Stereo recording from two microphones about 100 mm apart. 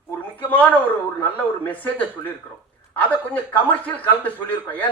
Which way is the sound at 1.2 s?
15° left (ahead or behind).